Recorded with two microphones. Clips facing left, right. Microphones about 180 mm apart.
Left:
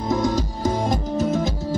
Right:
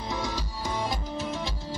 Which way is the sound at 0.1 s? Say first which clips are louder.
Left 12 dB; 45° left (ahead or behind).